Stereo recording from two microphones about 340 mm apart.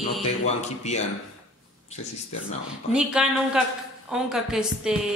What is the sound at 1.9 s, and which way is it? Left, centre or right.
Speech, centre.